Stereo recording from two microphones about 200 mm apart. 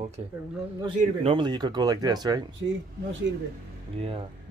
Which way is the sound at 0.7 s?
25° right (ahead or behind).